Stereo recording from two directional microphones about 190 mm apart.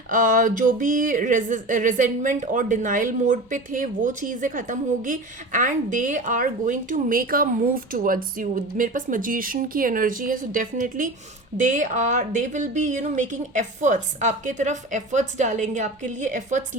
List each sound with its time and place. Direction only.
0.1 s speech: 45° right (ahead or behind)